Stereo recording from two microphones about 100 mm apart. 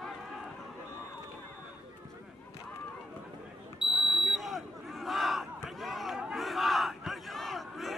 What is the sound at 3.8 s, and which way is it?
Smoke detector, 10° right (ahead or behind).